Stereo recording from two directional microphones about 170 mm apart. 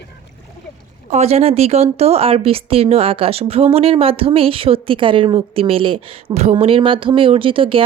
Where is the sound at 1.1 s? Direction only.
40° right (ahead or behind).